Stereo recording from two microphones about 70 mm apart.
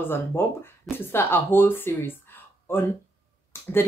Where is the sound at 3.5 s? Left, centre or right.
Left.